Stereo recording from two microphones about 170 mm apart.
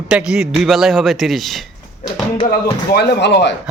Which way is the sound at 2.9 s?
75° left (ahead or behind).